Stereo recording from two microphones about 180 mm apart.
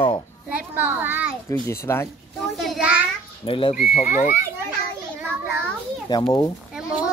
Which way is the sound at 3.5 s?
30° left (ahead or behind).